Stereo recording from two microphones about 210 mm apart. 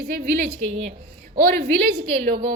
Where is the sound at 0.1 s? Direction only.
45° right (ahead or behind).